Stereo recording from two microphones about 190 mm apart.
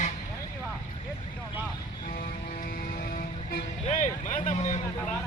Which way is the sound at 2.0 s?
45° left (ahead or behind).